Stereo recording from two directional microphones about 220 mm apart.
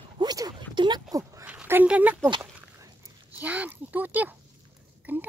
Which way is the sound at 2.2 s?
20° right (ahead or behind).